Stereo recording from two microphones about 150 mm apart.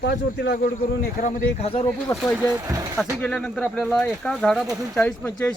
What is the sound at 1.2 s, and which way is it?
Speech, 45° left (ahead or behind).